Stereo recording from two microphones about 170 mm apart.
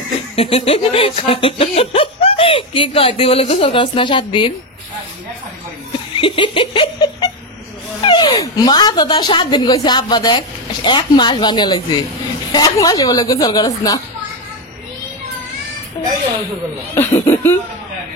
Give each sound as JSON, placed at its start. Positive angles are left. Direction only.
{"t": 0.4, "sound": "speech", "side_deg": 35}
{"t": 6.1, "sound": "giggle", "side_deg": 30}
{"t": 8.0, "sound": "speech", "side_deg": 25}
{"t": 16.9, "sound": "speech", "side_deg": 15}